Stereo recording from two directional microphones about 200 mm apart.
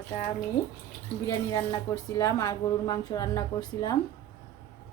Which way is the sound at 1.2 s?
20° left (ahead or behind).